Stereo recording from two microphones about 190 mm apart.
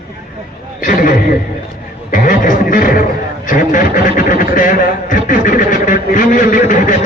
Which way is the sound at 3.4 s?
45° left (ahead or behind).